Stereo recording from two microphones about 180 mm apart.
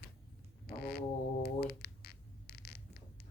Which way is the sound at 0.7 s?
60° left (ahead or behind).